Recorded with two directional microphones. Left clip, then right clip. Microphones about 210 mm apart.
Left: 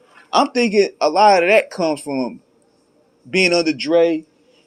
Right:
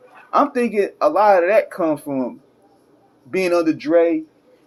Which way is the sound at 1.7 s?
30° left (ahead or behind).